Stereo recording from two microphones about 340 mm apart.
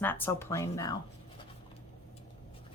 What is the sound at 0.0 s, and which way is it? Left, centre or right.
Speech, centre.